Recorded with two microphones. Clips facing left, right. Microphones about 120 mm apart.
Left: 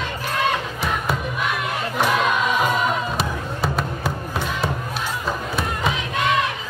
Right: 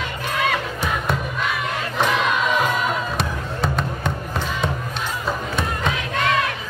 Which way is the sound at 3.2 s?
5° left (ahead or behind).